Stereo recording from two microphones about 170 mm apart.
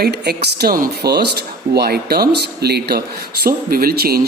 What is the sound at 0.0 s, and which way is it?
Speech, 70° right (ahead or behind).